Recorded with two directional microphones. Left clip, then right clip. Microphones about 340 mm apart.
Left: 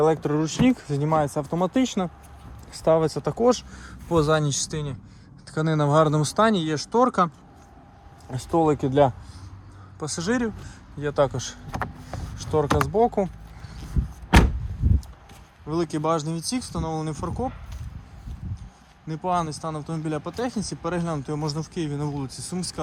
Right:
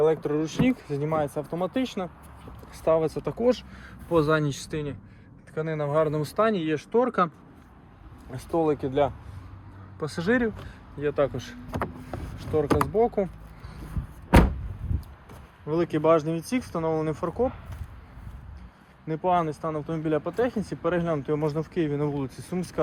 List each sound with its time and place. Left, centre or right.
0.0 s speech: left
6.0 s speech: centre
8.3 s speech: left
10.0 s speech: centre
15.7 s speech: centre
19.0 s speech: centre